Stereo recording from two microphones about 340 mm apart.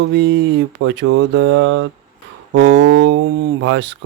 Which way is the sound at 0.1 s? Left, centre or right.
Right.